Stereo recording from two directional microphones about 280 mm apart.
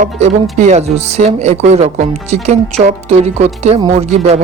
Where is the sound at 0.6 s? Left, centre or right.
Right.